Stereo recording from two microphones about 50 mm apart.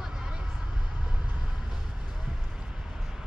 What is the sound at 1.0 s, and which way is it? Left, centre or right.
Vehicle, right.